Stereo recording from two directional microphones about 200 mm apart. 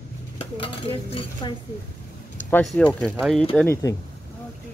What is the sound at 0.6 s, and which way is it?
Cutlery, 25° left (ahead or behind).